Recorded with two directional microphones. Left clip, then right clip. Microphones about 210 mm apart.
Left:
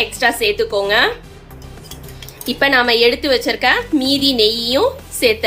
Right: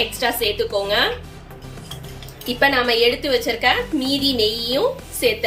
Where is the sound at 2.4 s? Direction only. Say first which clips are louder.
Left 3 dB; 20° left (ahead or behind).